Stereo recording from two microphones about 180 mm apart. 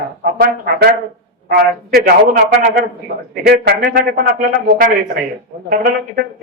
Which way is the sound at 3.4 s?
65° right (ahead or behind).